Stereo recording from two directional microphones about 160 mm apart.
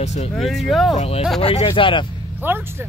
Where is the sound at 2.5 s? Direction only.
15° right (ahead or behind).